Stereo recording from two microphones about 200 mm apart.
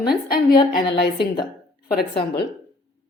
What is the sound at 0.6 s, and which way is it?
Speech, 25° left (ahead or behind).